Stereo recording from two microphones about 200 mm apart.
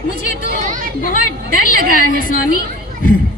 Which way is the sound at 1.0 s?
45° left (ahead or behind).